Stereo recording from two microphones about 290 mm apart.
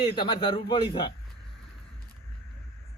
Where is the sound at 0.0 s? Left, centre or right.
Centre.